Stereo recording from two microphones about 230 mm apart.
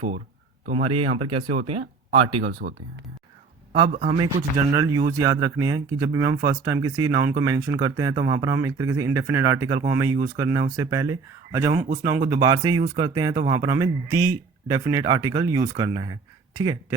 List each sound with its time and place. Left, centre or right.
1.2 s speech: right
1.5 s speech: right
3.9 s speech: right
4.2 s speech: centre